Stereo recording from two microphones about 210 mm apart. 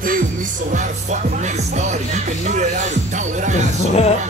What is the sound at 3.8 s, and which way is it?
Speech, 30° left (ahead or behind).